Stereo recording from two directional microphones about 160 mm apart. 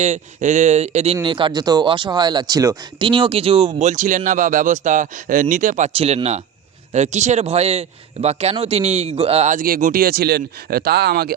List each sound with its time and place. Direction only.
0.0 s speech: 50° right (ahead or behind)
5.9 s speech: 35° right (ahead or behind); by 11.3 s 75° right (ahead or behind)